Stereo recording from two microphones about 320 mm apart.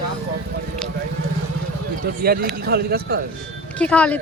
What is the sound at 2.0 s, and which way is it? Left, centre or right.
A man's voice, right.